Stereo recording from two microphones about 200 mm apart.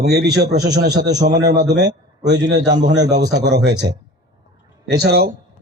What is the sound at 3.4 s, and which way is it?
Speech, 55° right (ahead or behind).